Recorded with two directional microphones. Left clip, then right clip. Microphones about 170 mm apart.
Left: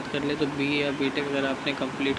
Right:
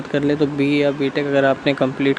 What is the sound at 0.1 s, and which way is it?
Speech, 40° right (ahead or behind).